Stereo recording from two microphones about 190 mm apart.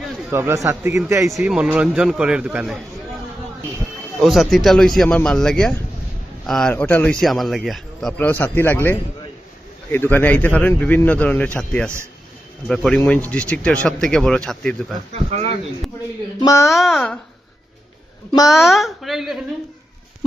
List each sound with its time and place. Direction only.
0.3 s a man's voice: 15° right (ahead or behind)
1.3 s a man's voice: 5° right (ahead or behind)
4.2 s a man's voice: centre (ahead or behind)
15.1 s speech: 35° right (ahead or behind)
16.4 s speech: 15° left (ahead or behind)
16.7 s a man's voice: centre (ahead or behind)
18.4 s a man's voice: centre (ahead or behind)